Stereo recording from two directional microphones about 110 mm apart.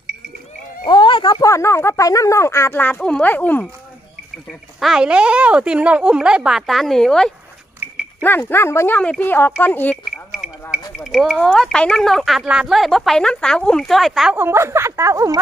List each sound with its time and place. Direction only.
0.9 s a sound: 45° left (ahead or behind)
1.4 s speech: 30° left (ahead or behind)
4.8 s a woman's voice: 5° right (ahead or behind)
7.8 s dog: 15° right (ahead or behind)
8.2 s speech: 20° left (ahead or behind)
9.0 s speech: 10° left (ahead or behind)
10.3 s a sound: 5° right (ahead or behind)
10.9 s speech: centre (ahead or behind)
14.3 s speech: 20° right (ahead or behind)